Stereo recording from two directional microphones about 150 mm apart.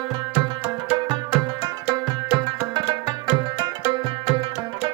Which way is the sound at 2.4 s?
30° right (ahead or behind).